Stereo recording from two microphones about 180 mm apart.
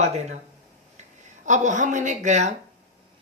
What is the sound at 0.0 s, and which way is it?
Speech, 40° right (ahead or behind).